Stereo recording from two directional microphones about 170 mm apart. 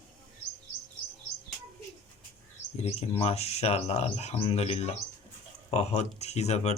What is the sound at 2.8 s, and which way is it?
Speech, 35° left (ahead or behind).